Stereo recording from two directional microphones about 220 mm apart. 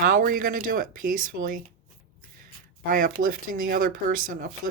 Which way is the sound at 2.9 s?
40° right (ahead or behind).